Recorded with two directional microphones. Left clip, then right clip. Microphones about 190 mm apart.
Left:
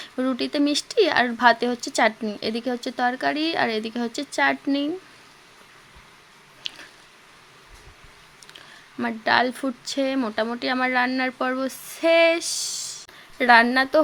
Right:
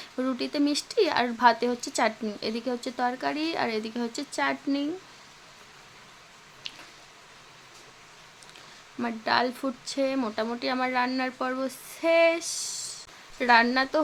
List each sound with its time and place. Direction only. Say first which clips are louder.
0.0 s speech: left 4 dB; 15° left (ahead or behind)
6.6 s a sound: left 6 dB; 20° left (ahead or behind)
9.0 s speech: left 5 dB; 20° left (ahead or behind)